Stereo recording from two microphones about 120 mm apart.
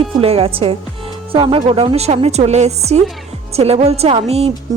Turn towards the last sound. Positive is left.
turn(degrees=-60)  # may be behind; listen again after turning